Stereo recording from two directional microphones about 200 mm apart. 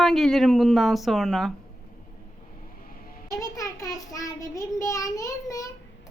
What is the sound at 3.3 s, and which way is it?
Child singing, 15° left (ahead or behind).